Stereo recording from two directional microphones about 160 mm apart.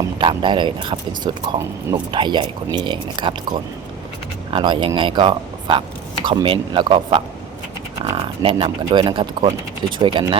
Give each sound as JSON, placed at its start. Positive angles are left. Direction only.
{"t": 0.2, "sound": "speech", "side_deg": -30}
{"t": 4.5, "sound": "speech", "side_deg": -30}